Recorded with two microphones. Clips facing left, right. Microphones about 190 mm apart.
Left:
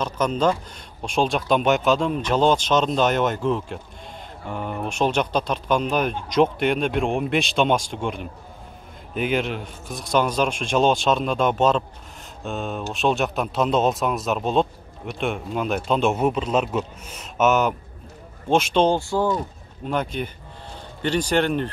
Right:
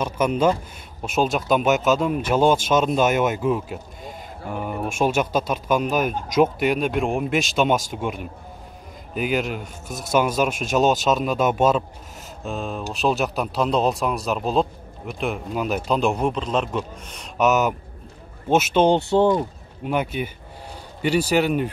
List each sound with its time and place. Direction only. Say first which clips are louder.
0.0 s speech: right 2 dB; 10° right (ahead or behind)
18.9 s speech: right 4 dB; 20° right (ahead or behind)
19.8 s speech: right 1 dB; 10° right (ahead or behind)